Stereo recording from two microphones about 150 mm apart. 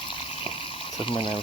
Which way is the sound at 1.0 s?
35° left (ahead or behind).